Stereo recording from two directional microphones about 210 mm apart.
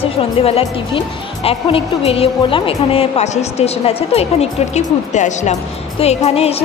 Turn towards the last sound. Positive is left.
turn(degrees=30)  # may be behind; listen again after turning